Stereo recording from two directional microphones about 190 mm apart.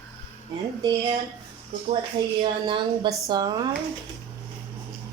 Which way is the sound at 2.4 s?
25° right (ahead or behind).